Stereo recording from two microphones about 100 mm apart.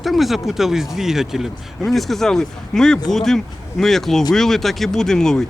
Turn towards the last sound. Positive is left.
turn(degrees=5)  # may be behind; listen again after turning